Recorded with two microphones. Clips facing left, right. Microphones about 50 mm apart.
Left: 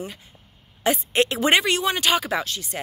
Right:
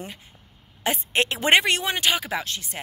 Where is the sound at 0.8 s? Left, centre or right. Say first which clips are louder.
Left 3 dB; right.